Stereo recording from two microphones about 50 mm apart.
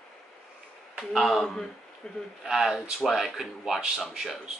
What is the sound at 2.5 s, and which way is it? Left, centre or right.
Speech, centre.